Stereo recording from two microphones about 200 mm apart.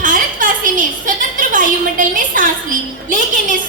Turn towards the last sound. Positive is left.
turn(degrees=-40)  # may be behind; listen again after turning